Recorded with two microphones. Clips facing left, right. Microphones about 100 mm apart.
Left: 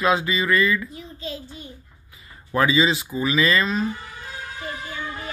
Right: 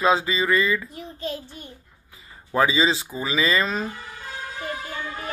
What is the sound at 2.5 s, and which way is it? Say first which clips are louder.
Speech: left 1 dB; 25° right (ahead or behind).